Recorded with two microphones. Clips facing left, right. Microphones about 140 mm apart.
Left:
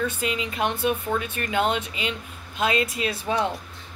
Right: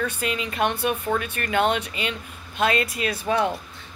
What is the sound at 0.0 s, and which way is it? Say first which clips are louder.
Speech: even; 20° left (ahead or behind).